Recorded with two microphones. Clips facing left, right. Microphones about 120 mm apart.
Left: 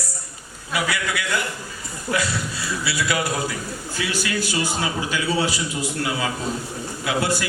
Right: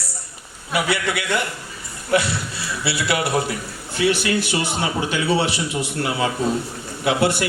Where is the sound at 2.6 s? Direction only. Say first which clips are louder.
Right 2 dB; 25° right (ahead or behind).